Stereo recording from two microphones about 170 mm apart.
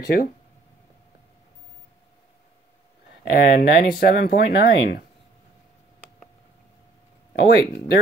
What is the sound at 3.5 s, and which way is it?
Speech, 55° left (ahead or behind).